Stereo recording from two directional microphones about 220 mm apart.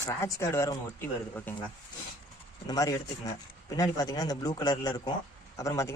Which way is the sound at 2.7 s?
15° left (ahead or behind).